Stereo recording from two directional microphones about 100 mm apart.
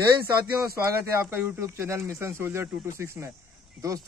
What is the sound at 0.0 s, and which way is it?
Speech, 30° right (ahead or behind).